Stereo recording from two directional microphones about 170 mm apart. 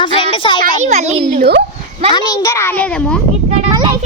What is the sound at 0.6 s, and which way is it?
Speech, 45° right (ahead or behind).